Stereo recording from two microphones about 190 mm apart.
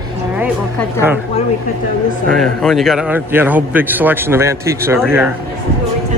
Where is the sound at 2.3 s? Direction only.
Centre (ahead or behind).